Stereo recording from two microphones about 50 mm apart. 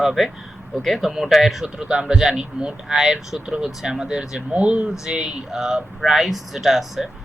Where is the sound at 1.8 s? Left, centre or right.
Centre.